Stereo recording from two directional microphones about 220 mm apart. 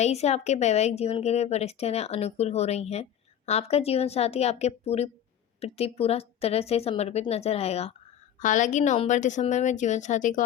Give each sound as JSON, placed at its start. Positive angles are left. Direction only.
{"t": 0.0, "sound": "a woman's voice", "side_deg": 30}